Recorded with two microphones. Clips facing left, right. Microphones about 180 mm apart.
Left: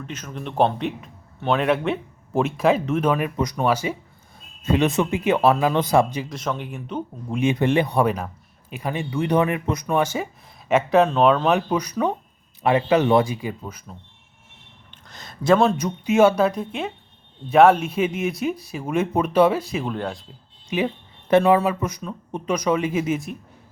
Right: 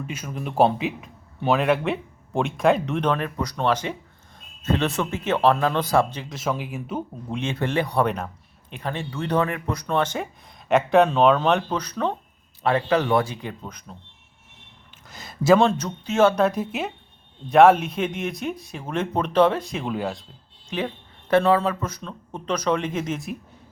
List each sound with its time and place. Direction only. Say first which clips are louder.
0.0 s speech: right 1 dB; 10° right (ahead or behind); by 6.2 s 15° left (ahead or behind)
6.2 s speech: even; 5° right (ahead or behind)
7.3 s speech: left 5 dB; 15° left (ahead or behind)
8.0 s speech: left 2 dB; centre (ahead or behind); by 13.3 s 20° left (ahead or behind)
13.3 s speech: left 4 dB; 5° left (ahead or behind)
14.8 s speech: right 1 dB; 5° right (ahead or behind)
20.7 s speech: left 4 dB; 10° left (ahead or behind)